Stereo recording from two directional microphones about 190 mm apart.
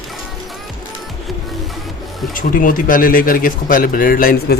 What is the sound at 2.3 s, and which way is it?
Speech, 45° left (ahead or behind).